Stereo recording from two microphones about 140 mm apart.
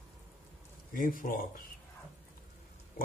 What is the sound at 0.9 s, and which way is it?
Speech, 80° left.